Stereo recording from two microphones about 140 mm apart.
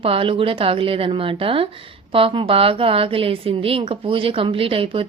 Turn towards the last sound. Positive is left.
turn(degrees=-40)  # may be behind; listen again after turning